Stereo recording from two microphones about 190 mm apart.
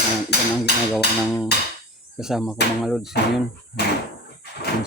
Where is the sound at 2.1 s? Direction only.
Centre (ahead or behind).